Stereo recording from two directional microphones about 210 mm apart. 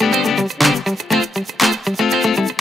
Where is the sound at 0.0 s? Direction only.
Centre (ahead or behind).